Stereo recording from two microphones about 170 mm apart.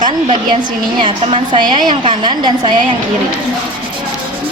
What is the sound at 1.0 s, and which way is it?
A woman's voice, 30° right (ahead or behind).